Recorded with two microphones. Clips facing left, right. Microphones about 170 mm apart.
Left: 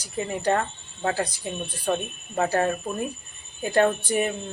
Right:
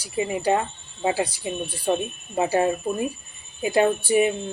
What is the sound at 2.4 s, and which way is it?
Speech, 15° right (ahead or behind).